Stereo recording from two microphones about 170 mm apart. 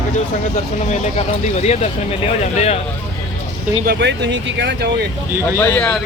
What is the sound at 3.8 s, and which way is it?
Speech, 80° right.